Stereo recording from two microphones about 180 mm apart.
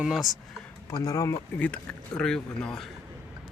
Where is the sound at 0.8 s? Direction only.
20° left (ahead or behind).